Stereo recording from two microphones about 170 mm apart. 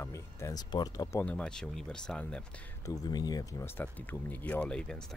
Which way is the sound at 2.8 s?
20° left (ahead or behind).